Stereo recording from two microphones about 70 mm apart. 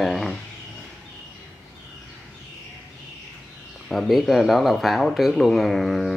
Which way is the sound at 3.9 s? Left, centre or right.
Centre.